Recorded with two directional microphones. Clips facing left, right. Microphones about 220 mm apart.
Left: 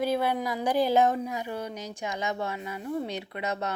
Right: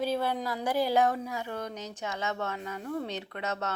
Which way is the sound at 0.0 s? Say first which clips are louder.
Left 3 dB; 10° left (ahead or behind).